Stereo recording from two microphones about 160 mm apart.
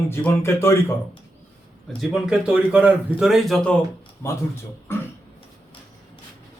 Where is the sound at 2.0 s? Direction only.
5° right (ahead or behind).